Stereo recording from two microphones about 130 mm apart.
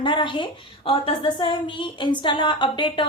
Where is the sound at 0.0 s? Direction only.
40° left (ahead or behind).